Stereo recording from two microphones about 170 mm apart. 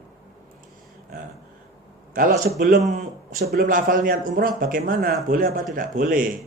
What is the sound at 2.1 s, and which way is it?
A man's voice, 60° right (ahead or behind).